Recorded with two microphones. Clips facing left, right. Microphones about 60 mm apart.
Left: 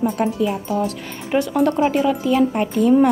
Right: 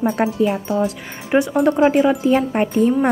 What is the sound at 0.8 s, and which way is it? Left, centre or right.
Speech, centre.